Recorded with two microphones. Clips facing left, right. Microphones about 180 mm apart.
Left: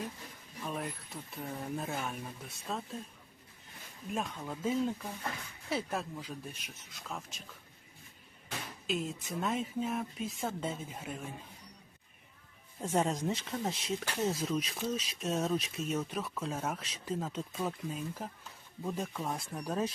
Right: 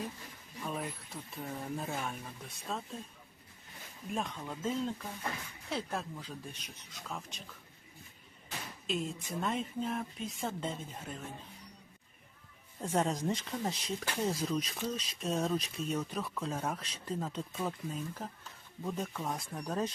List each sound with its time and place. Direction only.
0.6 s speech: centre (ahead or behind)
4.1 s speech: 5° left (ahead or behind)
8.9 s speech: centre (ahead or behind)
12.8 s speech: centre (ahead or behind)